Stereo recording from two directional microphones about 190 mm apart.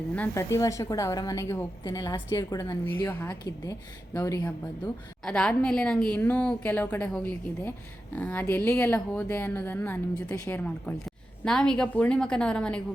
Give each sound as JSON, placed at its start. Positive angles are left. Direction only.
{"t": 0.1, "sound": "speech", "side_deg": 10}
{"t": 5.2, "sound": "a woman's voice", "side_deg": 5}